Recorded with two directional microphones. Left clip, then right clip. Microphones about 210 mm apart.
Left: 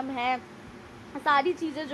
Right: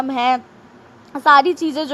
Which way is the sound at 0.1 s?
35° right (ahead or behind).